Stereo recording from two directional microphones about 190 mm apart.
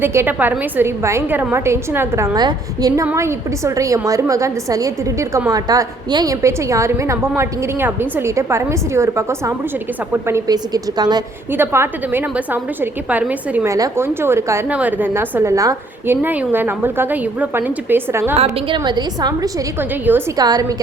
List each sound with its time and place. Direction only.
0.0 s a woman's voice: 10° right (ahead or behind)
18.4 s a woman's voice: 25° right (ahead or behind)